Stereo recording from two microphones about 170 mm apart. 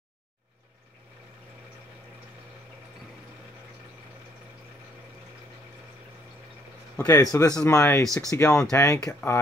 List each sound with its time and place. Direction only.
7.0 s speech: 15° left (ahead or behind)